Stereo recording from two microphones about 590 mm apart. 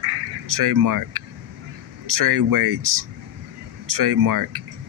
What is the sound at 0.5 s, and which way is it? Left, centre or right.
Speech, right.